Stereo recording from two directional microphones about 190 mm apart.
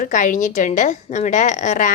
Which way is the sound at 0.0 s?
45° left (ahead or behind).